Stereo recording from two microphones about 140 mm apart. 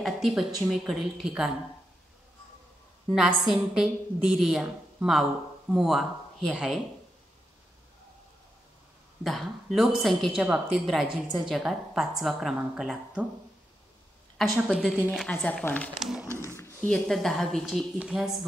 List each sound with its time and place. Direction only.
0.0 s a woman's voice: 5° right (ahead or behind)
3.1 s a woman's voice: 5° right (ahead or behind)
9.2 s a woman's voice: centre (ahead or behind)
14.7 s a woman's voice: centre (ahead or behind)
16.0 s speech: centre (ahead or behind)
16.3 s a sound: 20° left (ahead or behind)
16.8 s a woman's voice: 5° left (ahead or behind)